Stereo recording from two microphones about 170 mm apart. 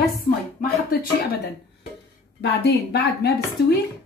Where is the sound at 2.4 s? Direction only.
75° left (ahead or behind).